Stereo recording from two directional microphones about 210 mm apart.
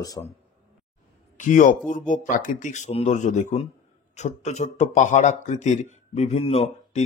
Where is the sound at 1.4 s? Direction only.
35° left (ahead or behind).